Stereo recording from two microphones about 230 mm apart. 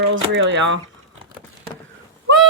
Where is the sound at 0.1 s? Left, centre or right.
Right.